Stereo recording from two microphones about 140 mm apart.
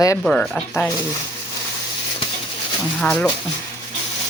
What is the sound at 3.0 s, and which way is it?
Speech, 5° left (ahead or behind).